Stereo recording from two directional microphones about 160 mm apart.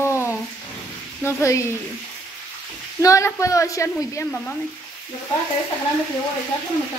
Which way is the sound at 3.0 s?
20° left (ahead or behind).